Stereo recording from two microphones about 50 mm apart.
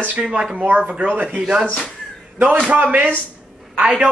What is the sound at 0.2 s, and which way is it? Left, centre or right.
A man's voice, centre.